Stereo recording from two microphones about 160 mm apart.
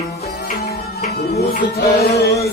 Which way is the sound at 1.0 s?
45° left (ahead or behind).